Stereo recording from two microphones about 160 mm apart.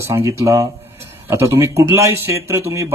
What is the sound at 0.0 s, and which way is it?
Speech, 20° right (ahead or behind).